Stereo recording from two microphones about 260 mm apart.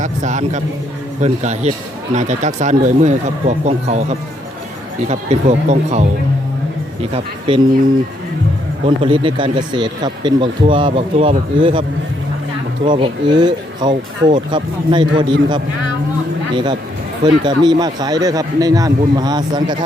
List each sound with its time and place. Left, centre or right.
0.0 s speech: right
9.0 s speech: centre
17.2 s speech: centre